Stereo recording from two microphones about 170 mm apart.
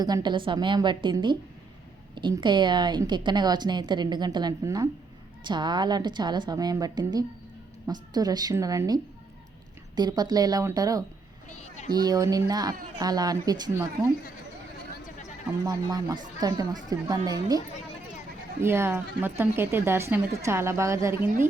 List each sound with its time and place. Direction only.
0.0 s a woman's voice: 25° right (ahead or behind)
15.6 s a woman's voice: 20° right (ahead or behind)
18.6 s speech: 15° right (ahead or behind)